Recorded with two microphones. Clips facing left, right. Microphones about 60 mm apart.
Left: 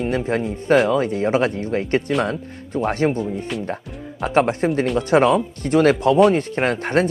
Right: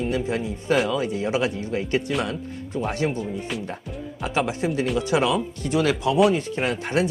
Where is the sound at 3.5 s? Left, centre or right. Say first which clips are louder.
Left 4 dB; centre.